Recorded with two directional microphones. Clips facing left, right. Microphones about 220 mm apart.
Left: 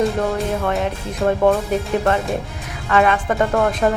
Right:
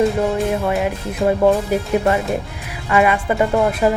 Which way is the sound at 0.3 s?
5° right (ahead or behind).